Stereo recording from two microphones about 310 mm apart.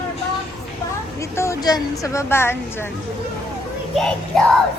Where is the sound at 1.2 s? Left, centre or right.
Centre.